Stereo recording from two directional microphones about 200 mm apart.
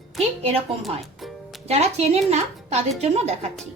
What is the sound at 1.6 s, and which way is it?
Speech, 30° right (ahead or behind).